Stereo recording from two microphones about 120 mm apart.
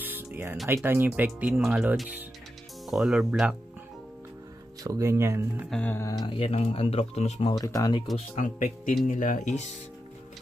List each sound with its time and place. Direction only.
0.0 s music: 15° right (ahead or behind)
0.8 s speech: 20° right (ahead or behind)
1.5 s speech: 5° right (ahead or behind)
4.8 s speech: 25° right (ahead or behind)
5.7 s music: 10° left (ahead or behind)
5.9 s speech: 30° left (ahead or behind)
6.2 s speech: 50° left (ahead or behind); by 7.4 s 65° left (ahead or behind)
7.4 s speech: 30° left (ahead or behind)
8.4 s speech: 90° left